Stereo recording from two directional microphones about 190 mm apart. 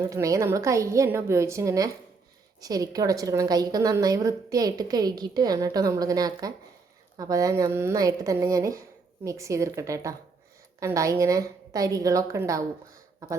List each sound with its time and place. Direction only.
0.0 s a woman's voice: 15° right (ahead or behind)